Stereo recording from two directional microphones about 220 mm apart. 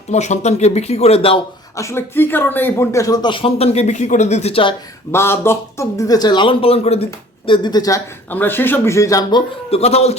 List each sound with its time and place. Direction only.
0.1 s speech: 30° left (ahead or behind)
1.7 s a man's voice: 15° left (ahead or behind)
5.1 s a man's voice: 10° left (ahead or behind)
9.6 s speech: 25° left (ahead or behind)